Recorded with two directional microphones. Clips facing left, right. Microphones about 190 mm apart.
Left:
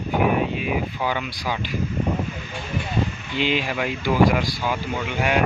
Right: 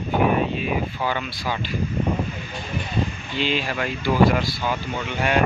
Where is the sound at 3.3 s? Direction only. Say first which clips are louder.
Left 1 dB; 15° left (ahead or behind).